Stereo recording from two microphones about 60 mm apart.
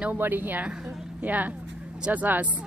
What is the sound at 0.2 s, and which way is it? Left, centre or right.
A woman's voice, right.